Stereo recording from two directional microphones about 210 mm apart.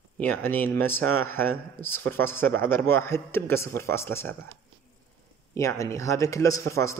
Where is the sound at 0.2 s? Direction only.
10° left (ahead or behind).